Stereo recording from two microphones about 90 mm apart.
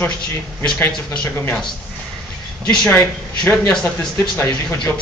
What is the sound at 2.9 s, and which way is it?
A man's voice, 25° left (ahead or behind).